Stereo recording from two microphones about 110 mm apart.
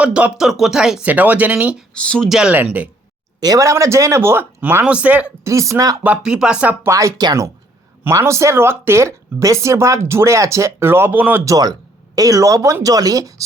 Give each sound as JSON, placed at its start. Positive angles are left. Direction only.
{"t": 0.0, "sound": "speech", "side_deg": -10}
{"t": 1.9, "sound": "speech", "side_deg": 10}
{"t": 2.3, "sound": "speech", "side_deg": -5}
{"t": 3.4, "sound": "speech", "side_deg": -30}
{"t": 5.4, "sound": "speech", "side_deg": -30}
{"t": 6.0, "sound": "speech", "side_deg": -10}
{"t": 6.8, "sound": "speech", "side_deg": -30}
{"t": 8.0, "sound": "speech", "side_deg": -25}
{"t": 11.4, "sound": "speech", "side_deg": -35}